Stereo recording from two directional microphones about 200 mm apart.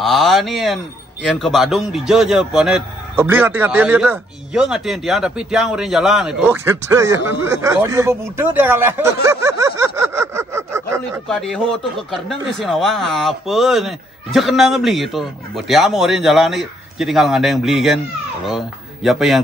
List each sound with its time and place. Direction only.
0.0 s a man's voice: centre (ahead or behind)
11.2 s speech: centre (ahead or behind)